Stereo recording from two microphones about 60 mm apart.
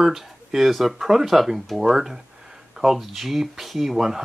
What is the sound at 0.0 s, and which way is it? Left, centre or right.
Speech, centre.